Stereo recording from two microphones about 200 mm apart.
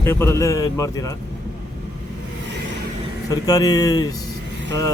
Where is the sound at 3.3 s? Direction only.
20° left (ahead or behind).